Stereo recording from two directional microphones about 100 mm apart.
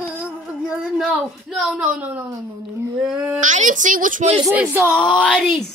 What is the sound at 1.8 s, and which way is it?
Speech, 15° right (ahead or behind).